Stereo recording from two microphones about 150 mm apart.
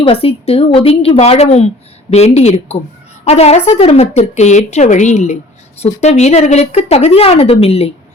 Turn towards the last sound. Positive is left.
turn(degrees=40)  # may be behind; listen again after turning